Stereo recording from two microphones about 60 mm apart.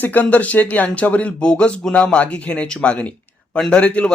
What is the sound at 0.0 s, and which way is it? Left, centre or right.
Speech, left.